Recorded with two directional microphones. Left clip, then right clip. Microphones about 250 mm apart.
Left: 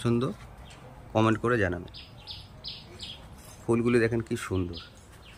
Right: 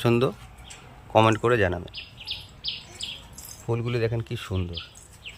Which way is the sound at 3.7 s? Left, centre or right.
Right.